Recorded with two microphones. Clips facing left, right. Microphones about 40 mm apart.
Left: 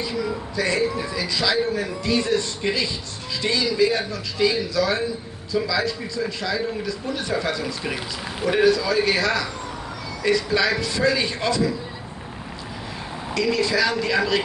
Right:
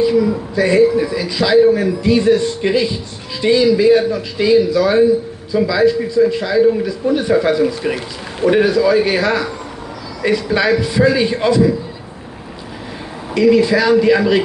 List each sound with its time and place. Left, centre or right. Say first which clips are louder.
0.6 s a man's voice: right 11 dB; right
13.3 s a man's voice: right 10 dB; right